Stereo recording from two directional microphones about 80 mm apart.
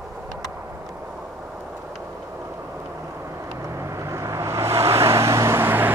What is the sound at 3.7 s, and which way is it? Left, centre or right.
Vehicle, right.